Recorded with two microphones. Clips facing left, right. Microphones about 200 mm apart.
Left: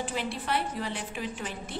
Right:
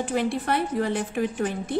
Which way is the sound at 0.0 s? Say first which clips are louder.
Right 8 dB; 50° right (ahead or behind).